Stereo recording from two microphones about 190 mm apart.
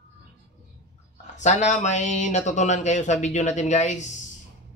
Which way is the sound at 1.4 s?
40° left (ahead or behind).